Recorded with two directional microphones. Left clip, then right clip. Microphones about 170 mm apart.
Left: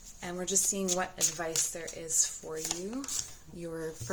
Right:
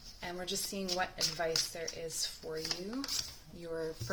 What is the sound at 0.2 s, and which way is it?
Speech, 35° left (ahead or behind).